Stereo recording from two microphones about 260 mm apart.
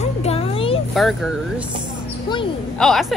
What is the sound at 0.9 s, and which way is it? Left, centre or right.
Speech, centre.